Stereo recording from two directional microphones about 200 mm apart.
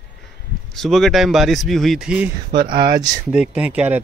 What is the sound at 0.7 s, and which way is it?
Speech, centre (ahead or behind).